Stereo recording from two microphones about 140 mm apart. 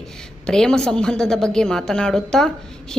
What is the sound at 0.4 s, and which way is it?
A woman's voice, 5° left (ahead or behind).